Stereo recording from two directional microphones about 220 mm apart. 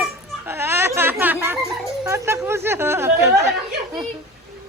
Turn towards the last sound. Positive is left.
turn(degrees=-15)  # may be behind; listen again after turning